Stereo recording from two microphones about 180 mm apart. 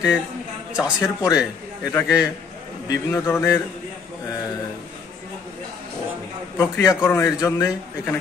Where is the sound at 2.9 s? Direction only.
15° left (ahead or behind).